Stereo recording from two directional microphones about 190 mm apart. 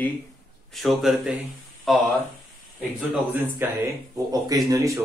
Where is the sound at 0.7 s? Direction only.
Centre (ahead or behind).